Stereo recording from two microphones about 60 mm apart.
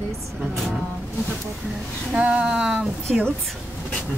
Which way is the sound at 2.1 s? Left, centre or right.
Centre.